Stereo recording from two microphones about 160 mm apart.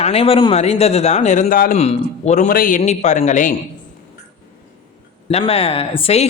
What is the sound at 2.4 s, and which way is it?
Speech, 60° left (ahead or behind).